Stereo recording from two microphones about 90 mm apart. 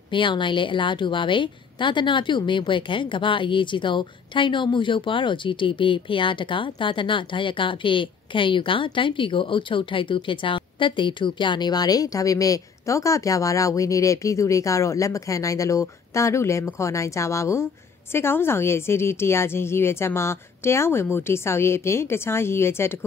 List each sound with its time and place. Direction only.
0.1 s a woman's voice: 65° left (ahead or behind); by 22.9 s 25° left (ahead or behind)